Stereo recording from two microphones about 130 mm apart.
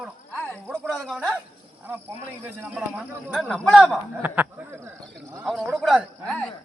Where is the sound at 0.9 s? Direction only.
Centre (ahead or behind).